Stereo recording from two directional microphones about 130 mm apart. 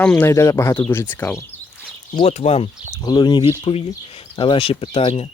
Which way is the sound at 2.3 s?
55° left (ahead or behind).